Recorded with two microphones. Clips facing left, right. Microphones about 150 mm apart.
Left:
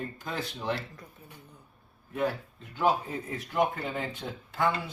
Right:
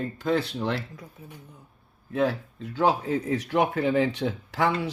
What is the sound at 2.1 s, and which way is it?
Speech, 90° right.